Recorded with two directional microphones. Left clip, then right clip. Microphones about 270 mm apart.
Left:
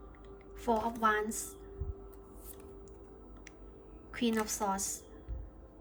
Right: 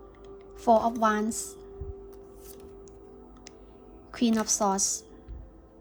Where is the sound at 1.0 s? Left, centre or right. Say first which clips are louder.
Right 4 dB; centre.